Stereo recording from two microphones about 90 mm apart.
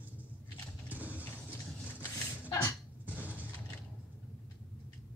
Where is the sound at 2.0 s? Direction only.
45° left (ahead or behind).